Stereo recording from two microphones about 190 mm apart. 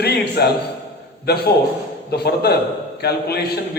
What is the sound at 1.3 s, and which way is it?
A man's voice, 60° left (ahead or behind).